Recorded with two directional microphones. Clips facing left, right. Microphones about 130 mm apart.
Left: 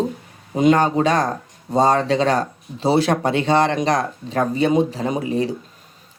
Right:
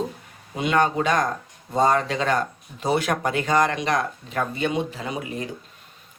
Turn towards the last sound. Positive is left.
turn(degrees=35)  # may be behind; listen again after turning